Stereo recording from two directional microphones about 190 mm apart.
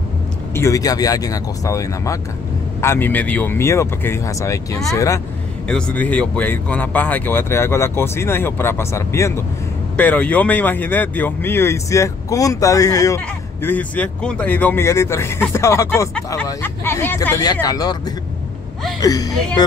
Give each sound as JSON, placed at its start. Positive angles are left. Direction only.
{"t": 0.6, "sound": "speech", "side_deg": 15}
{"t": 5.7, "sound": "speech", "side_deg": 5}
{"t": 18.9, "sound": "a woman's voice", "side_deg": 20}